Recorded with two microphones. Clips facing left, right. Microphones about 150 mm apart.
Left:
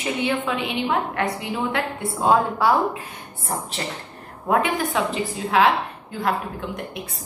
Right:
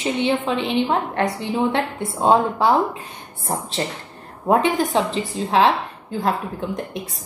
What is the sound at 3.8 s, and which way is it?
A woman's voice, 30° right (ahead or behind).